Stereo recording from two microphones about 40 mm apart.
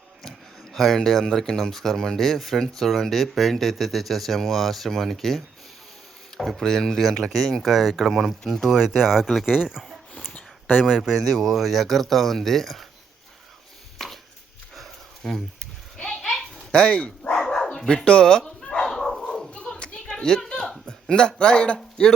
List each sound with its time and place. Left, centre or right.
0.2 s speech: centre
6.6 s speech: centre
9.5 s speech: centre
14.0 s a sound: centre
16.7 s speech: left
17.3 s dog: centre
18.9 s dog: centre
19.5 s a sound: left
20.1 s a sound: centre
20.8 s speech: left